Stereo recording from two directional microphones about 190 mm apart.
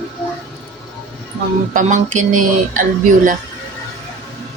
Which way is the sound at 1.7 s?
40° right (ahead or behind).